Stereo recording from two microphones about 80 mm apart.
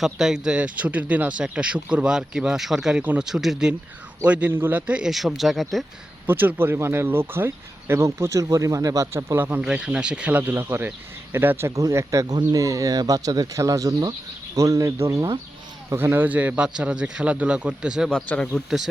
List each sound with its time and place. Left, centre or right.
0.0 s speech: centre
4.2 s speech: centre
5.0 s speech: centre
6.2 s speech: right
9.1 s speech: right
9.6 s speech: centre
10.5 s speech: right
11.8 s speech: right
15.9 s speech: right; by 18.1 s centre
18.3 s speech: centre